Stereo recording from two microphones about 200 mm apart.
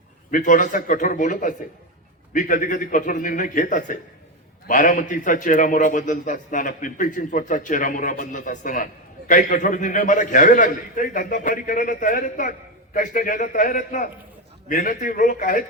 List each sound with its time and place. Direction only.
0.3 s a man's voice: 40° left (ahead or behind)